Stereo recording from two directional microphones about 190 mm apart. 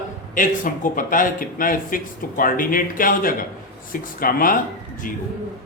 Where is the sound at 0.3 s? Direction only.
45° left (ahead or behind).